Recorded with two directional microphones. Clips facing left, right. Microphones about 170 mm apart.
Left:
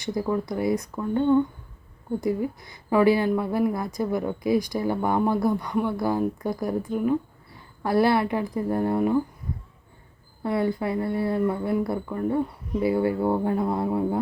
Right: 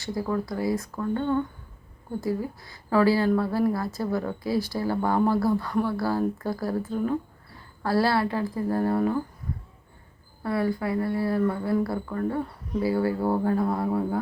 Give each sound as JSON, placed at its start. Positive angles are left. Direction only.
{"t": 0.0, "sound": "speech", "side_deg": 20}
{"t": 10.4, "sound": "speech", "side_deg": 20}